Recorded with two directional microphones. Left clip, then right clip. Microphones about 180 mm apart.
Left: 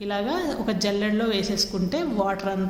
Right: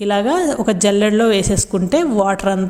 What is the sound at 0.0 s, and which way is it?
A woman's voice, 45° right (ahead or behind).